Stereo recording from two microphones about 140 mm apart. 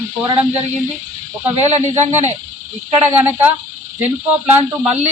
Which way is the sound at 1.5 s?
50° right (ahead or behind).